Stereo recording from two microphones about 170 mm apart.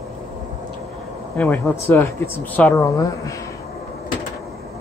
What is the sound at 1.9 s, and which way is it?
Speech, 15° left (ahead or behind).